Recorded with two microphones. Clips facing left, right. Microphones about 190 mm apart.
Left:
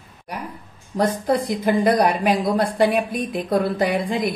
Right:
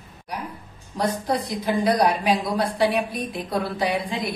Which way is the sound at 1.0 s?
55° left (ahead or behind).